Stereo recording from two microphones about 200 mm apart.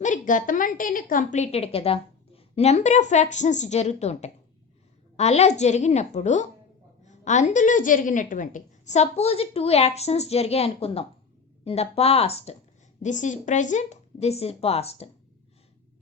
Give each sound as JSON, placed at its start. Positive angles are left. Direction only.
{"t": 0.0, "sound": "a woman's voice", "side_deg": 40}
{"t": 7.0, "sound": "a sound", "side_deg": 35}
{"t": 7.5, "sound": "a woman's voice", "side_deg": 40}